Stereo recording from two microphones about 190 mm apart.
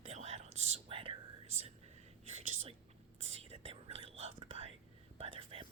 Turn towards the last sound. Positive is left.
turn(degrees=-30)  # may be behind; listen again after turning